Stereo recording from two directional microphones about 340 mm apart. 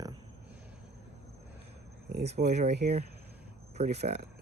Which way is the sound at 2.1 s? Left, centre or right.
Right.